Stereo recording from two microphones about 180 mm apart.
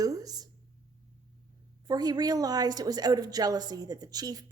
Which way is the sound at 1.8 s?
20° right (ahead or behind).